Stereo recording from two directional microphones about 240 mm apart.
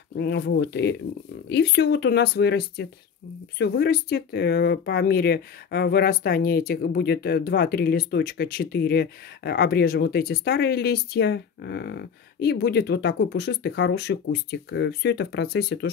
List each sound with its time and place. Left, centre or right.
0.2 s speech: left